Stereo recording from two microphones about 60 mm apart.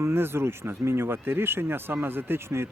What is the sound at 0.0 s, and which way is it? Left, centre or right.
Speech, right.